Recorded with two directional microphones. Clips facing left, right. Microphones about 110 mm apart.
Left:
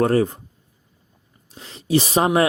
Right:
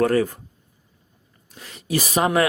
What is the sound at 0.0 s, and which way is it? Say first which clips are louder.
Speech: left 1 dB; 30° left (ahead or behind).